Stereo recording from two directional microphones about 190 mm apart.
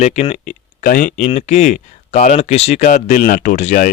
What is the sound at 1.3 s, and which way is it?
Speech, 35° left (ahead or behind).